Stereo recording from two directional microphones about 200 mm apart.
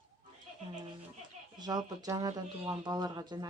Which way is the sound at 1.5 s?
20° right (ahead or behind).